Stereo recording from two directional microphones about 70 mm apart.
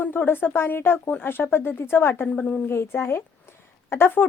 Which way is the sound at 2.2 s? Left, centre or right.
Centre.